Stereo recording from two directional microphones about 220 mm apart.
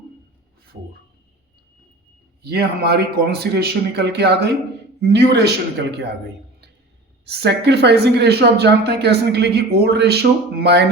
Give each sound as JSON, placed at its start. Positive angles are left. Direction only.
{"t": 2.4, "sound": "speech", "side_deg": -45}
{"t": 7.3, "sound": "speech", "side_deg": -50}